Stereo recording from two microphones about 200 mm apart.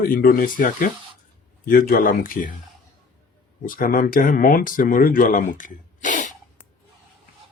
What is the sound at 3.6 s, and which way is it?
Speech, 45° left (ahead or behind).